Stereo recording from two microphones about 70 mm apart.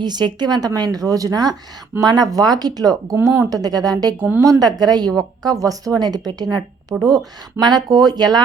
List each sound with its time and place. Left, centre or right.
0.0 s a woman's voice: right
4.4 s a woman's voice: right
6.9 s speech: right
7.6 s a woman's voice: right